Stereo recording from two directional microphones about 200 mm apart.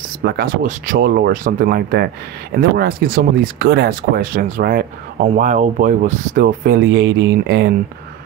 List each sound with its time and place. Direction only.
0.2 s speech: 50° right (ahead or behind)